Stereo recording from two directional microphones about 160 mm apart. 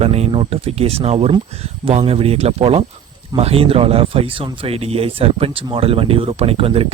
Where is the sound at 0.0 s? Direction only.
40° right (ahead or behind).